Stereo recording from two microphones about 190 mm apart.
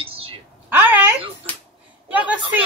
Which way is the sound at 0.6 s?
10° right (ahead or behind).